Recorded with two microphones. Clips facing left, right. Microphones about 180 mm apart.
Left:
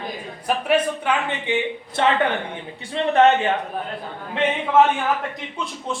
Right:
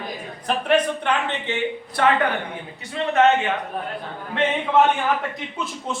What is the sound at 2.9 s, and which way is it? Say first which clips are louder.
Speech: left 2 dB; 35° left (ahead or behind).